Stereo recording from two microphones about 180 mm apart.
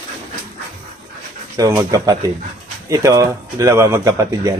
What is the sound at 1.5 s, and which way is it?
Speech, 20° right (ahead or behind).